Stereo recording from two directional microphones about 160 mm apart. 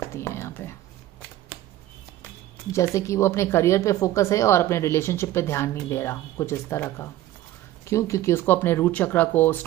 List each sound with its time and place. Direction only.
0.1 s whispering: 15° left (ahead or behind)
2.7 s a woman's voice: 15° left (ahead or behind)